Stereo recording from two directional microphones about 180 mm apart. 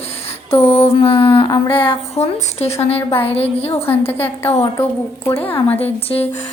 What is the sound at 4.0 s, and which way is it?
A woman's voice, 10° left (ahead or behind).